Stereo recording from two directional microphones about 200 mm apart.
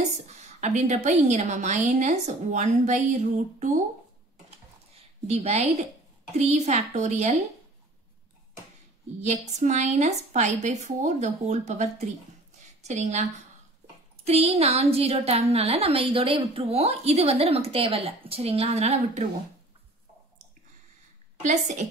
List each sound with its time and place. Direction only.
0.4 s a woman's voice: 35° right (ahead or behind)
4.9 s a sound: 35° right (ahead or behind)
6.3 s a woman's voice: 35° right (ahead or behind)
9.2 s a woman's voice: 35° right (ahead or behind)
21.4 s a woman's voice: 35° right (ahead or behind)